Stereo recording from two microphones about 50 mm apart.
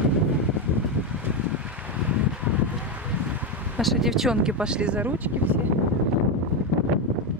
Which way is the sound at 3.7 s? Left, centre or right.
Centre.